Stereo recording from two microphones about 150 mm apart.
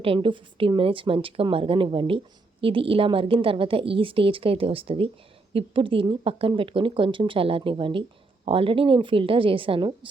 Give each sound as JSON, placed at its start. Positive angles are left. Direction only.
{"t": 0.0, "sound": "a woman's voice", "side_deg": -35}